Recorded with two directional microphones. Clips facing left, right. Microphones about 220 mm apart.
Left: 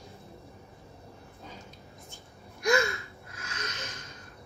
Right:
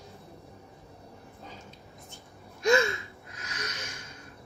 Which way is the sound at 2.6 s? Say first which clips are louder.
Right 2 dB; 25° right (ahead or behind).